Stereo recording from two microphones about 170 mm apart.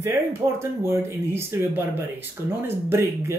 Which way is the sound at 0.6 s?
15° right (ahead or behind).